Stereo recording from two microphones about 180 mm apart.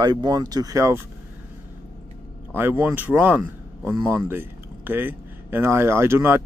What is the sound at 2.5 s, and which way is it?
Speech, 10° right (ahead or behind).